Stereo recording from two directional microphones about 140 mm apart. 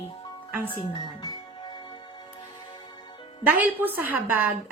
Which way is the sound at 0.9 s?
30° left (ahead or behind).